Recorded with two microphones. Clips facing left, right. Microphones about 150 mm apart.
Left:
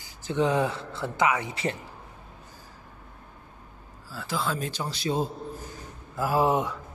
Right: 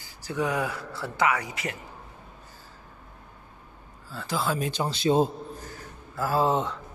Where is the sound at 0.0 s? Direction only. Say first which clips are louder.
Left 3 dB; 20° left (ahead or behind).